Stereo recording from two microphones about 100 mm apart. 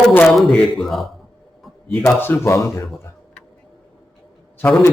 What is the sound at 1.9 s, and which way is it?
Speech, 20° left (ahead or behind).